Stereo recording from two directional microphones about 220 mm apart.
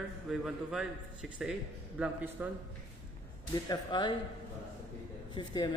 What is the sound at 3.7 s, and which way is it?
Speech, 20° left (ahead or behind).